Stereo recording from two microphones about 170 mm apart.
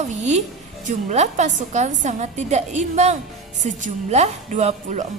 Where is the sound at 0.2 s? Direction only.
40° right (ahead or behind).